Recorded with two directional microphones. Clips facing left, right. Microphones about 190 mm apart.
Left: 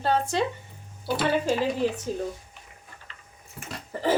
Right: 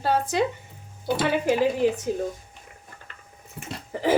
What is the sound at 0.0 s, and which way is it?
Speech, 10° right (ahead or behind).